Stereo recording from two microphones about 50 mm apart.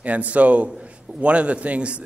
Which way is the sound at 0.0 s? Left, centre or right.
Right.